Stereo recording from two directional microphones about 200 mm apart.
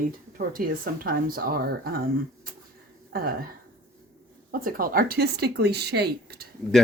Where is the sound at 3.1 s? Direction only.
50° right (ahead or behind).